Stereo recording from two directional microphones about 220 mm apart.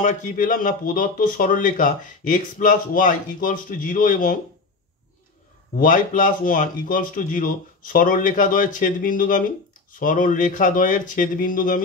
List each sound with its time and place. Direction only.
0.0 s speech: 35° left (ahead or behind)
5.8 s speech: 40° left (ahead or behind)